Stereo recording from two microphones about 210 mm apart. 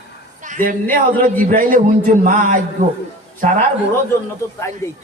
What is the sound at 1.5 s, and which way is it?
A man's voice, 40° right (ahead or behind).